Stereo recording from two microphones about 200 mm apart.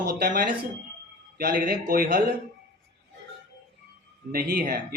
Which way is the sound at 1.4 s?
50° right (ahead or behind).